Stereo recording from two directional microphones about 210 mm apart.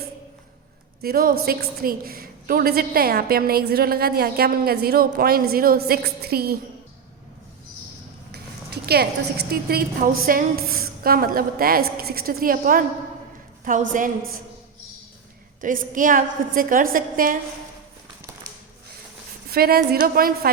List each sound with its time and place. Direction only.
1.0 s a woman's voice: 45° right (ahead or behind)
8.3 s a woman's voice: 50° right (ahead or behind)
13.9 s a woman's voice: 40° right (ahead or behind)
15.6 s a woman's voice: 40° right (ahead or behind)
19.5 s a woman's voice: 45° right (ahead or behind)